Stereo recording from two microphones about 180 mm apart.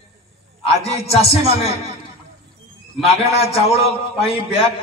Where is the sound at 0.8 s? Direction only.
35° left (ahead or behind).